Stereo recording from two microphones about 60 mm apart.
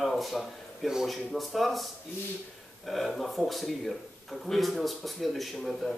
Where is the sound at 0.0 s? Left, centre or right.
Centre.